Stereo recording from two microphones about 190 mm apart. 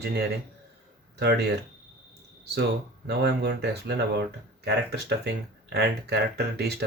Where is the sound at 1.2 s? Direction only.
60° right (ahead or behind).